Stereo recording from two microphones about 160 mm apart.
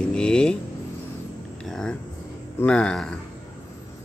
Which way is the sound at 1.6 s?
5° left (ahead or behind).